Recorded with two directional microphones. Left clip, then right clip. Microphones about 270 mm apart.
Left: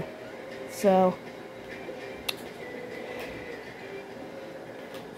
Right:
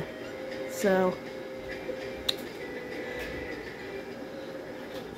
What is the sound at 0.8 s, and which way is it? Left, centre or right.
Speech, centre.